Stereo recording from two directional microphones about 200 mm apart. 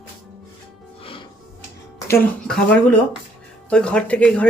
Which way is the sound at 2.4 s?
5° left (ahead or behind).